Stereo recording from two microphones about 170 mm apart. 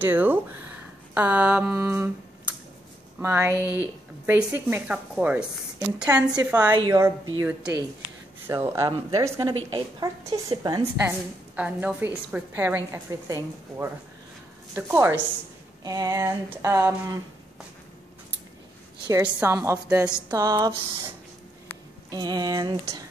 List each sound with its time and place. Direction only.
0.0 s a woman's voice: 10° right (ahead or behind)
6.0 s a woman's voice: 20° right (ahead or behind)
8.5 s a woman's voice: 15° right (ahead or behind)
11.1 s a woman's voice: 10° right (ahead or behind)
19.0 s a woman's voice: 15° right (ahead or behind)
22.1 s a woman's voice: 25° right (ahead or behind)